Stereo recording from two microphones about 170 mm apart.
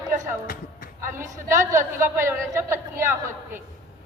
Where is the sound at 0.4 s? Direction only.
60° left (ahead or behind).